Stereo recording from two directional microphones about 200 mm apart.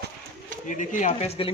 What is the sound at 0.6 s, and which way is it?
Speech, 40° left (ahead or behind).